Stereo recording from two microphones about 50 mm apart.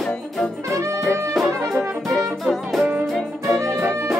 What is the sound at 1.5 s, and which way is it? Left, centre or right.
Brass instrument, right.